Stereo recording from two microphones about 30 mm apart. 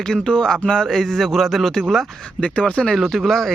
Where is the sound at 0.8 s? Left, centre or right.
Centre.